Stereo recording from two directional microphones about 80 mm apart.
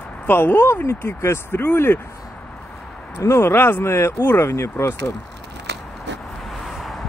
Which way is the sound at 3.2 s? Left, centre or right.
Left.